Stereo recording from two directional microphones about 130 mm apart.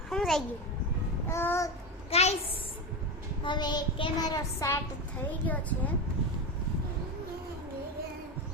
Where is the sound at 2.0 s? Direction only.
50° left (ahead or behind).